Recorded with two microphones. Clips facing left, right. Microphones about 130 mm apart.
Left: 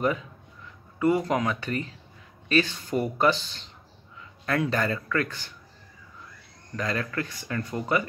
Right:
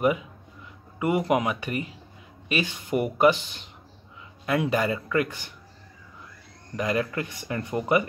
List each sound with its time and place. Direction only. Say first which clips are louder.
0.0 s speech: right 3 dB; 15° right (ahead or behind)
6.8 s speech: right 3 dB; 15° right (ahead or behind)